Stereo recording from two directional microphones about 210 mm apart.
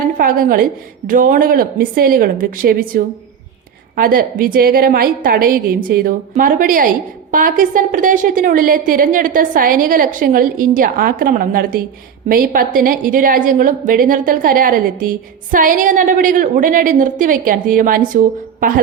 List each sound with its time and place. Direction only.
0.2 s a woman's voice: 40° right (ahead or behind)